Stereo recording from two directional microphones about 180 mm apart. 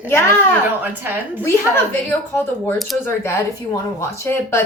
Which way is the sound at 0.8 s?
10° right (ahead or behind).